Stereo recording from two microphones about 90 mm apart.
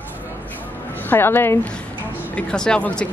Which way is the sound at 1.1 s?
25° left (ahead or behind).